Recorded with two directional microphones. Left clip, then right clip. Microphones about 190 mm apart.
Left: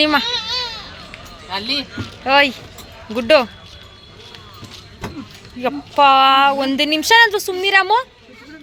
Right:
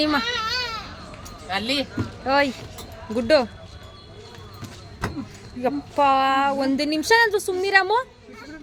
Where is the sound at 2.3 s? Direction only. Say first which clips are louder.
Left 7 dB; 5° right (ahead or behind).